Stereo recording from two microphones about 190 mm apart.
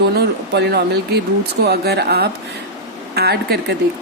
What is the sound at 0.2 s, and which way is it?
Speech, 60° right (ahead or behind).